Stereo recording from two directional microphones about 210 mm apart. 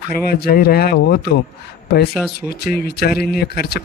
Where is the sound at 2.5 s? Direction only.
50° left (ahead or behind).